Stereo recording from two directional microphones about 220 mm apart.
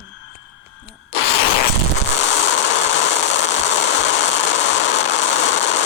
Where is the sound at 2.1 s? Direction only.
60° left (ahead or behind).